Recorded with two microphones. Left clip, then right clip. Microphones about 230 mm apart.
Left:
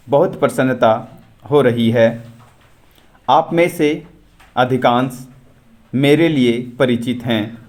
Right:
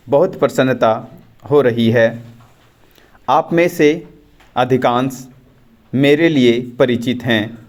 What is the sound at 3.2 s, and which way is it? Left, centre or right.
A man's voice, centre.